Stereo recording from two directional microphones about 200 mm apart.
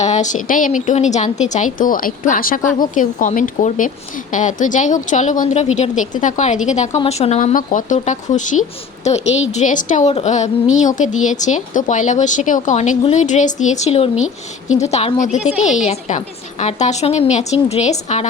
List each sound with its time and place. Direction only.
0.0 s a woman's voice: 35° left (ahead or behind)
15.4 s speech: 5° right (ahead or behind)
15.9 s a woman's voice: 35° left (ahead or behind)